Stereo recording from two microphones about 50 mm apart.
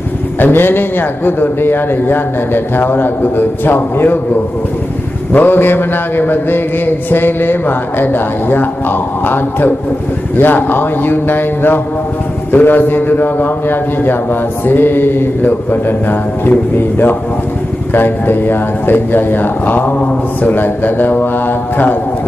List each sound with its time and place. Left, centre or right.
0.4 s a man's voice: left
5.3 s a man's voice: left